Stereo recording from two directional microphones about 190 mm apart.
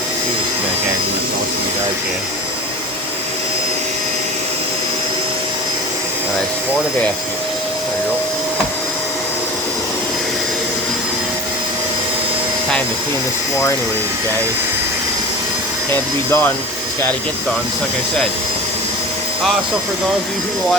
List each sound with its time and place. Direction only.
15.9 s speech: 10° left (ahead or behind)